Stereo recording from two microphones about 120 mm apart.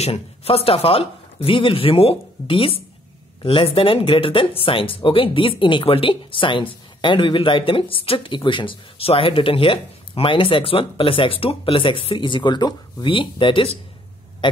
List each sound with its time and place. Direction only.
0.0 s speech: 55° left (ahead or behind)
14.4 s hum: 45° left (ahead or behind)